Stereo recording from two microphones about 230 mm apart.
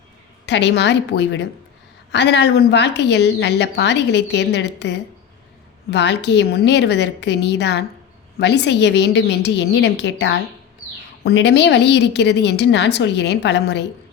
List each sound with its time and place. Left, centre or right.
0.4 s a woman's voice: left